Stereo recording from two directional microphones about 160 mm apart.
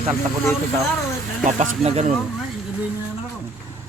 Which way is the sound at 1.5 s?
50° right (ahead or behind).